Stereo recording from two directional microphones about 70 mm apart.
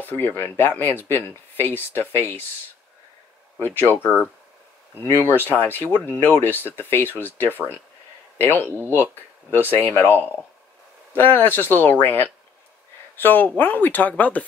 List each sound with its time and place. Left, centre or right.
0.0 s speech: left
3.9 s speech: left